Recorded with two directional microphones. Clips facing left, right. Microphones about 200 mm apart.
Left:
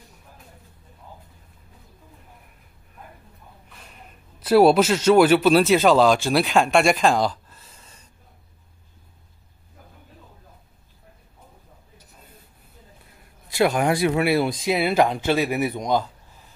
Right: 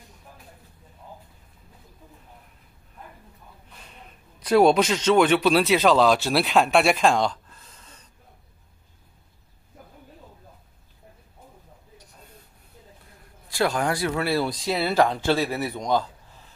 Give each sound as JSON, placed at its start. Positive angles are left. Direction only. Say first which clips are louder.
{"t": 4.4, "sound": "speech", "louder": "left 2 dB", "side_deg": 5}
{"t": 13.5, "sound": "speech", "louder": "left 4 dB", "side_deg": 20}